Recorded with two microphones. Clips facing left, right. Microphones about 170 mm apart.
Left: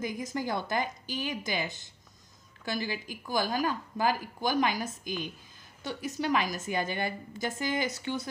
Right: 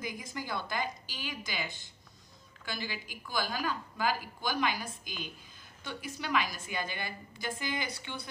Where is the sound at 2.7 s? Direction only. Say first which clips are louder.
Left 6 dB; 40° left (ahead or behind).